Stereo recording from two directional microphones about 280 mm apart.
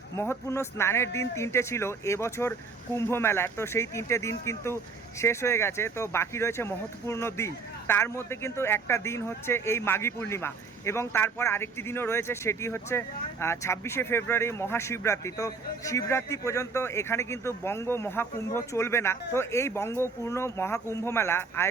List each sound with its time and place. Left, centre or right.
0.2 s speech: centre